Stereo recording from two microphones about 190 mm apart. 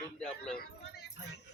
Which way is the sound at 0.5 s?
55° left (ahead or behind).